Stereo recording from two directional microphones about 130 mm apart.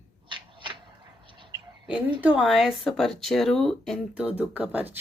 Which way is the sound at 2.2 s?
10° right (ahead or behind).